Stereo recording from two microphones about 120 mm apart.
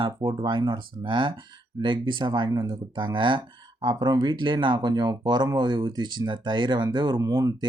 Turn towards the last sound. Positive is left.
turn(degrees=-30)  # may be behind; listen again after turning